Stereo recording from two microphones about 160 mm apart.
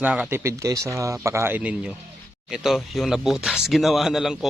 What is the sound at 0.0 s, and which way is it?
Speech, 5° right (ahead or behind).